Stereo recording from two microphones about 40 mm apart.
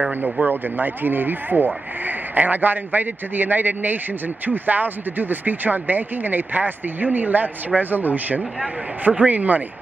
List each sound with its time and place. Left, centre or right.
0.2 s speech: right